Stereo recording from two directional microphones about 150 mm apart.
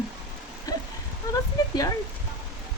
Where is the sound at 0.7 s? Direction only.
25° left (ahead or behind).